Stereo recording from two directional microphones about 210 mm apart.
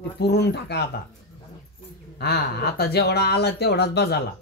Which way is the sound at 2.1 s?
50° left (ahead or behind).